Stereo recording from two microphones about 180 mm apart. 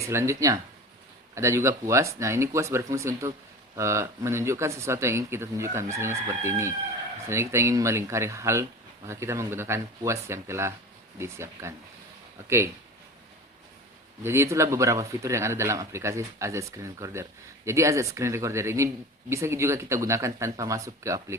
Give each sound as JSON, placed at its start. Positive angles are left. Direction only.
{"t": 0.0, "sound": "speech", "side_deg": -15}
{"t": 14.3, "sound": "speech", "side_deg": -15}